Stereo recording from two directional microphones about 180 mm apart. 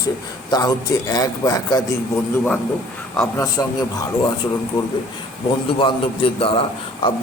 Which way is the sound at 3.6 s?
20° left (ahead or behind).